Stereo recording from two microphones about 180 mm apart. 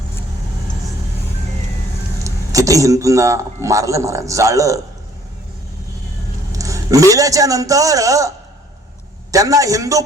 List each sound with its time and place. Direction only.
2.2 s a man's voice: 20° right (ahead or behind)
6.5 s a man's voice: 20° right (ahead or behind)
9.3 s a man's voice: 20° right (ahead or behind)